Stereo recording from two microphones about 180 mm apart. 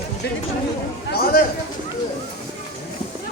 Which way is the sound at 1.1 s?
55° left (ahead or behind).